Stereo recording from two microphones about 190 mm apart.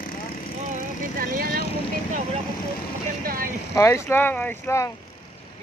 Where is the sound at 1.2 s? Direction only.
50° right (ahead or behind).